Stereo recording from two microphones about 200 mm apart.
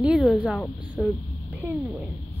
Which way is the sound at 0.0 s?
Centre (ahead or behind).